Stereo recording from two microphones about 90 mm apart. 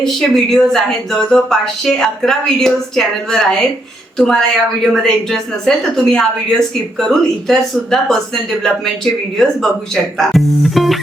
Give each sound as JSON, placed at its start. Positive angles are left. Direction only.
{"t": 0.0, "sound": "a woman's voice", "side_deg": 5}
{"t": 9.4, "sound": "a woman's voice", "side_deg": 5}